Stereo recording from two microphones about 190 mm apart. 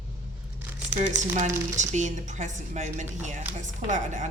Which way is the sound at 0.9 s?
40° right (ahead or behind).